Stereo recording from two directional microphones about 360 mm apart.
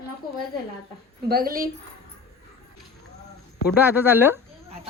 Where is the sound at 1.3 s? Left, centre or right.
Right.